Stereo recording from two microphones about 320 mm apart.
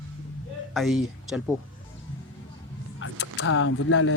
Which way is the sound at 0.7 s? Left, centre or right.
Centre.